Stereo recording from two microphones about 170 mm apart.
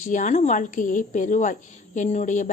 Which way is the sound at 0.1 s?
45° left (ahead or behind).